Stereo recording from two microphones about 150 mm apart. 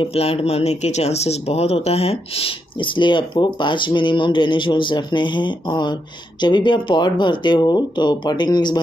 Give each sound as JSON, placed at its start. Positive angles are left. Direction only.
{"t": 0.0, "sound": "speech", "side_deg": 40}